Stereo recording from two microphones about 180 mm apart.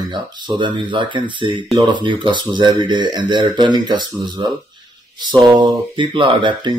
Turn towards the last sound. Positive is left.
turn(degrees=-25)  # may be behind; listen again after turning